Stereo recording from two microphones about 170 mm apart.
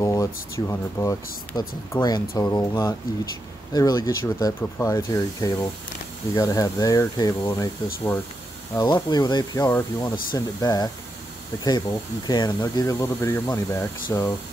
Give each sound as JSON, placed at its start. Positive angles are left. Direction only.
{"t": 0.0, "sound": "speech", "side_deg": 20}
{"t": 12.3, "sound": "speech", "side_deg": 25}